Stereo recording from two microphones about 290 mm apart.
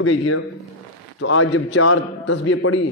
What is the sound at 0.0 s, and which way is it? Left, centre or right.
A man's voice, left.